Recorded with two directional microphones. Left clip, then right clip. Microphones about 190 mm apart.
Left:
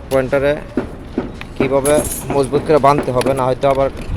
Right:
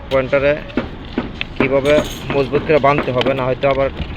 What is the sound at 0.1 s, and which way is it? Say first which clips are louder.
Speech: even; 25° left (ahead or behind).